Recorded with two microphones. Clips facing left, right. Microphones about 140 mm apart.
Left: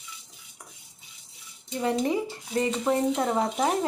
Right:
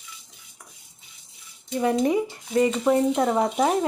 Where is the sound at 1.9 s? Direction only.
20° right (ahead or behind).